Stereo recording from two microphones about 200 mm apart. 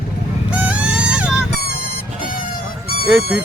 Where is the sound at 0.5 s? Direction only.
5° right (ahead or behind).